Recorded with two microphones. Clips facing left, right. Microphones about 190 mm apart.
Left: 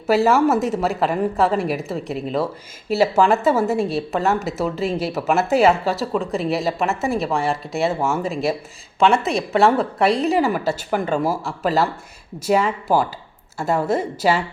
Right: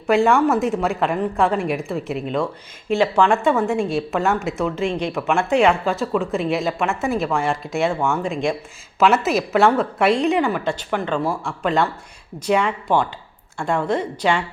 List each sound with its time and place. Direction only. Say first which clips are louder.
0.1 s a woman's voice: even; 5° left (ahead or behind)